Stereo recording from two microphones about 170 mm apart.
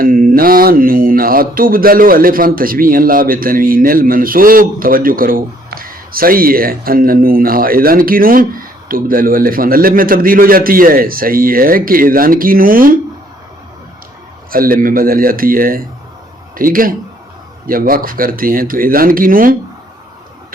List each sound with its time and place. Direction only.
0.0 s speech: 55° right (ahead or behind)
14.5 s speech: 55° right (ahead or behind)